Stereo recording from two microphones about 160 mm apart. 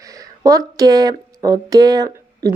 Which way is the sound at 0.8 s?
20° right (ahead or behind).